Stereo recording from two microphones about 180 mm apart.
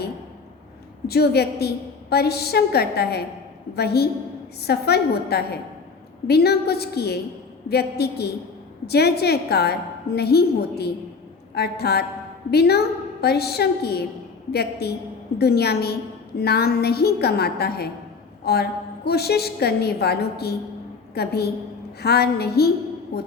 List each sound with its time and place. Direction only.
1.0 s a woman's voice: 65° left (ahead or behind)